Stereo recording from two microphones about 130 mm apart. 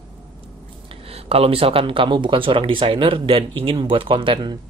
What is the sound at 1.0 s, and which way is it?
Speech, 50° right (ahead or behind).